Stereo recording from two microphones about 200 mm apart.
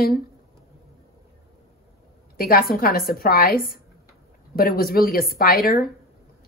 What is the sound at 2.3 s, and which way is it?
A woman's voice, 45° left (ahead or behind).